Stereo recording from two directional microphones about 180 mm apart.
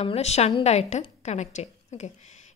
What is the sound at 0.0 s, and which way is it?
A woman's voice, 35° left (ahead or behind).